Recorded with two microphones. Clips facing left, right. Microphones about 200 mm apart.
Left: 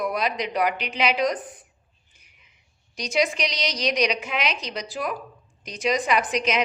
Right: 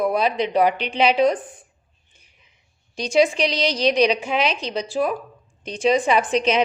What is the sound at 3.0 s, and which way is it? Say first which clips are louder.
A woman's voice: right 6 dB; 30° right (ahead or behind).